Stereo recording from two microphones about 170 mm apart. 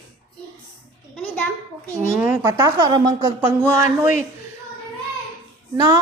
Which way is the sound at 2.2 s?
10° right (ahead or behind).